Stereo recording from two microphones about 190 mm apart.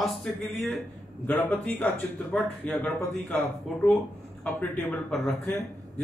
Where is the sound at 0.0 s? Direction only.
Centre (ahead or behind).